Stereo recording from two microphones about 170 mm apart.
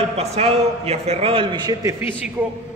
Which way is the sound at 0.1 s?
40° right (ahead or behind).